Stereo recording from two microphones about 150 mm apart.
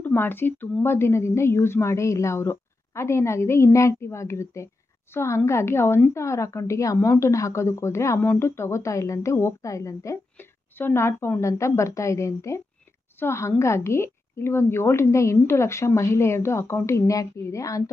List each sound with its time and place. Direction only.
0.0 s a woman's voice: 15° left (ahead or behind)